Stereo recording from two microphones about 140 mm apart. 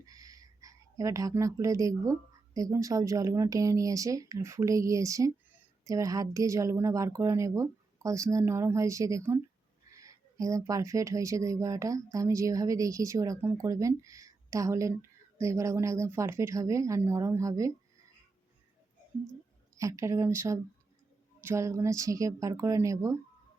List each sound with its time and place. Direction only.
0.0 s a sound: 25° right (ahead or behind)
2.6 s speech: 25° right (ahead or behind)
19.7 s speech: 20° right (ahead or behind)